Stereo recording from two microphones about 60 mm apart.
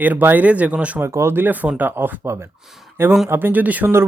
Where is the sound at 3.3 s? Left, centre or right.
Right.